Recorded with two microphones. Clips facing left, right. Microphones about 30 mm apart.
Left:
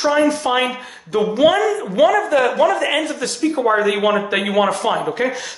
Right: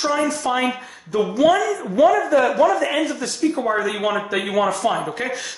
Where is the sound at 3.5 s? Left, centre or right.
Left.